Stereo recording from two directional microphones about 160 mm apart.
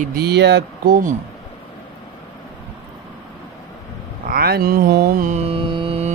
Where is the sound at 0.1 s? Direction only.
85° right.